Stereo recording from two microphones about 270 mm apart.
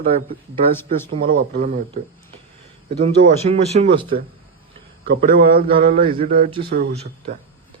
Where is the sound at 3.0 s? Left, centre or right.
Right.